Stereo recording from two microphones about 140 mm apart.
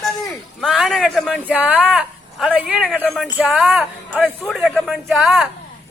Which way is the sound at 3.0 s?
5° left (ahead or behind).